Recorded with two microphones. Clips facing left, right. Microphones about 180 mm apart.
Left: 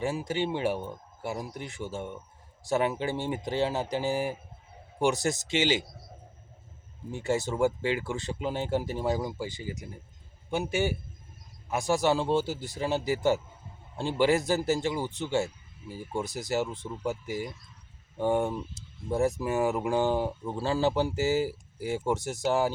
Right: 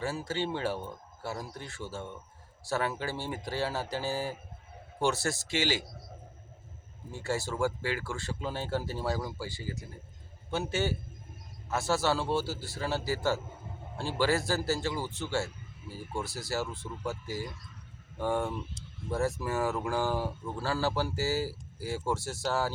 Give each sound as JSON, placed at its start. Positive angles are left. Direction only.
{"t": 0.0, "sound": "speech", "side_deg": 15}
{"t": 7.1, "sound": "speech", "side_deg": 20}